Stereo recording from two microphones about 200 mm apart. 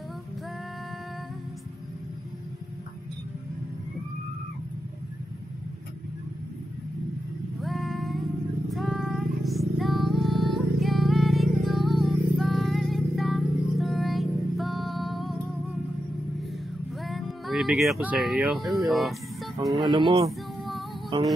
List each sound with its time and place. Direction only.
7.6 s female singing: centre (ahead or behind)
8.6 s music: centre (ahead or behind)
17.0 s speech: centre (ahead or behind)
19.9 s speech: 25° right (ahead or behind)
20.2 s child singing: centre (ahead or behind)